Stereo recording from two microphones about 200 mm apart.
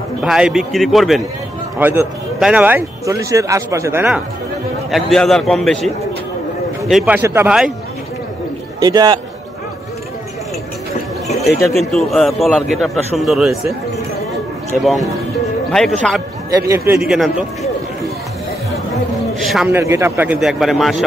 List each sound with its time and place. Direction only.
0.2 s a man's voice: 5° right (ahead or behind)
4.9 s a man's voice: centre (ahead or behind)
6.9 s a man's voice: 5° right (ahead or behind)
8.7 s a man's voice: 20° right (ahead or behind)
11.7 s a man's voice: centre (ahead or behind)
14.8 s a man's voice: centre (ahead or behind)
16.6 s speech: 15° right (ahead or behind)
19.4 s a sound: centre (ahead or behind)
19.7 s a man's voice: 15° right (ahead or behind)